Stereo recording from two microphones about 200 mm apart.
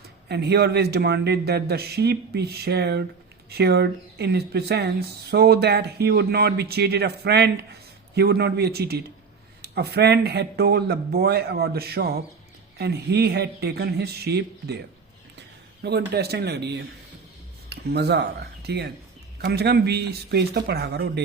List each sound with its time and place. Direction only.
0.3 s a man's voice: 55° right (ahead or behind)